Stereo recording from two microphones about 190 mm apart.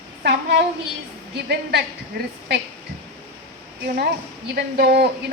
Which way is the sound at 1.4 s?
60° right (ahead or behind).